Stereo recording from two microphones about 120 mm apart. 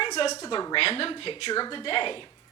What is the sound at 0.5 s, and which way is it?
Speech, 40° left (ahead or behind).